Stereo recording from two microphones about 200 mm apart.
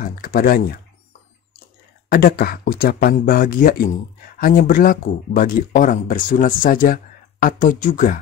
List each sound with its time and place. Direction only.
0.0 s speech: 45° left (ahead or behind)
2.0 s speech: 50° left (ahead or behind)